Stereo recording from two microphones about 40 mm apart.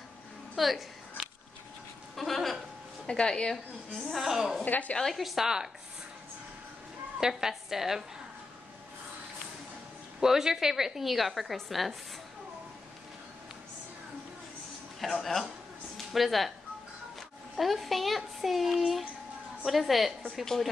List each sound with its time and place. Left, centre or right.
0.6 s a sound: centre
3.1 s a woman's voice: left
3.9 s a woman's voice: centre
4.6 s a woman's voice: left
5.1 s a woman's voice: centre
7.2 s a woman's voice: centre
10.2 s a woman's voice: centre
15.0 s speech: centre
17.6 s speech: centre